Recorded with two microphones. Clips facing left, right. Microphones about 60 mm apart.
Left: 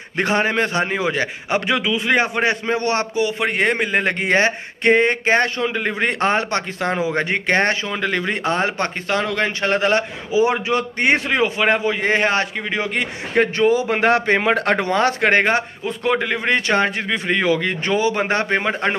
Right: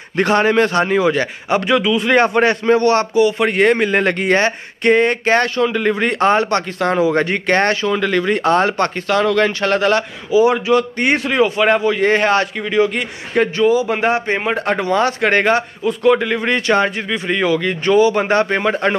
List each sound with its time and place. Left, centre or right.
0.2 s a man's voice: centre
2.8 s a man's voice: left
3.3 s a man's voice: centre
4.2 s a man's voice: left
14.8 s a man's voice: left
15.3 s a man's voice: left